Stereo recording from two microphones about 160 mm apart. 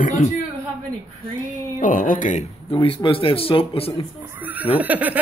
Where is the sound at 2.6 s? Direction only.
35° left (ahead or behind).